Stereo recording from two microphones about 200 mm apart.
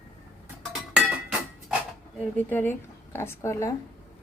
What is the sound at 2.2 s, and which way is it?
Speech, 10° left (ahead or behind).